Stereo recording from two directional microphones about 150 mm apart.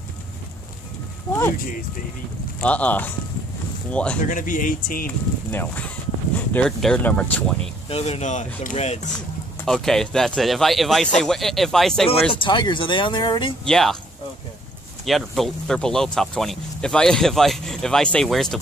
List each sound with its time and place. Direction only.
1.3 s a sound: centre (ahead or behind)
2.6 s speech: 10° left (ahead or behind)
4.2 s speech: 60° left (ahead or behind)
5.0 s speech: 15° left (ahead or behind)
7.9 s speech: 45° left (ahead or behind)
9.7 s speech: 5° left (ahead or behind)
12.3 s speech: 35° left (ahead or behind)
13.7 s speech: 5° left (ahead or behind)
15.0 s speech: centre (ahead or behind)